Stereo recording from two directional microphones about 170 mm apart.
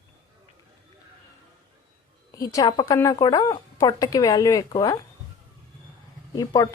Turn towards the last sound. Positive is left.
turn(degrees=20)  # may be behind; listen again after turning